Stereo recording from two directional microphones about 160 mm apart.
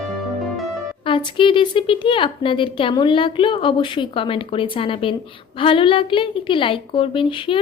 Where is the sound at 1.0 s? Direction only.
30° left (ahead or behind).